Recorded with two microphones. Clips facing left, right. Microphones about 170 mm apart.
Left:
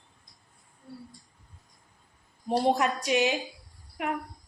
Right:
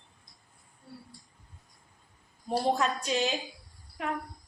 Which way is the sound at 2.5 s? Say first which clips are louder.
Left 3 dB; 15° left (ahead or behind).